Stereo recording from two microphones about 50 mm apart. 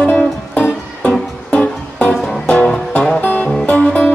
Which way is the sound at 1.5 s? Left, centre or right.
Left.